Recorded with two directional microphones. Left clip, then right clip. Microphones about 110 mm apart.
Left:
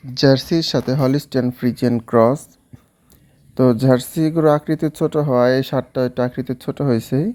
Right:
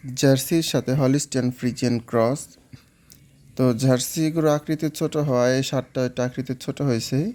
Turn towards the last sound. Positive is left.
turn(degrees=20)  # may be behind; listen again after turning